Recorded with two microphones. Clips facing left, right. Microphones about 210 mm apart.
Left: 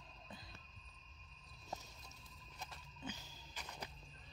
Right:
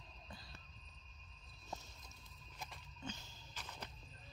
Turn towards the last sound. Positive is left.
turn(degrees=15)  # may be behind; listen again after turning